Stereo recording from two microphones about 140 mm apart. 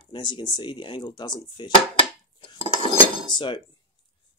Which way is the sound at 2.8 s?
35° left (ahead or behind).